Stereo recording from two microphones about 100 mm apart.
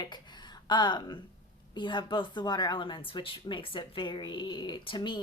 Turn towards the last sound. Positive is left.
turn(degrees=55)  # may be behind; listen again after turning